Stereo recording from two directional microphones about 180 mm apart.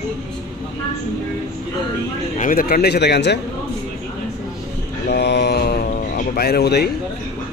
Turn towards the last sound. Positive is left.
turn(degrees=65)  # may be behind; listen again after turning